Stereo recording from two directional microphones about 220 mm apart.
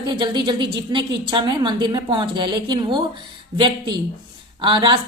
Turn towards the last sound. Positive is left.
turn(degrees=-20)  # may be behind; listen again after turning